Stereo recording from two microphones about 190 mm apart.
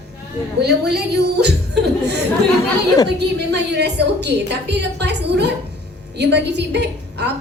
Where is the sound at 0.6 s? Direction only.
60° right (ahead or behind).